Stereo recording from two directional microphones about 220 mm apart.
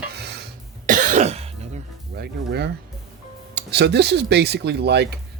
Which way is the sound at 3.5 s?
50° right (ahead or behind).